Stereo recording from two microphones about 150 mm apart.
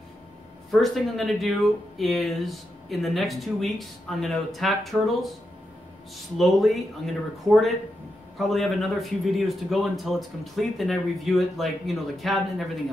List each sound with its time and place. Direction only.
0.7 s speech: centre (ahead or behind)
6.3 s speech: centre (ahead or behind)